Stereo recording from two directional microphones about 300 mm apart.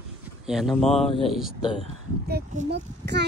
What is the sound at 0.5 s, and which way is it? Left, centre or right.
Speech, centre.